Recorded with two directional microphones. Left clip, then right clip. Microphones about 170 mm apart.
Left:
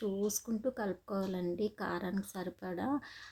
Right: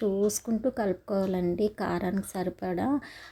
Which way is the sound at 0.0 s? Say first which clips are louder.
Right 9 dB; 25° right (ahead or behind).